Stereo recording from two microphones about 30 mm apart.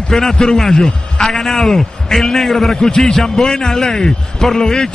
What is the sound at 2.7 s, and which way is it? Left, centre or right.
Speech, centre.